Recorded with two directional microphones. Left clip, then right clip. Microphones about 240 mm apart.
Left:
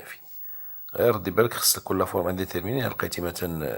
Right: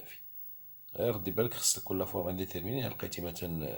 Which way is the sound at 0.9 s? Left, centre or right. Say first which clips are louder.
Left 11 dB; centre.